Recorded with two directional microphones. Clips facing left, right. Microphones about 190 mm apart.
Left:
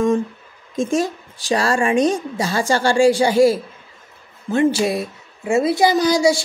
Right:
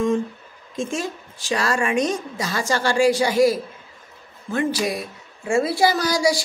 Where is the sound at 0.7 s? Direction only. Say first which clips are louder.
Left 7 dB; 35° left (ahead or behind).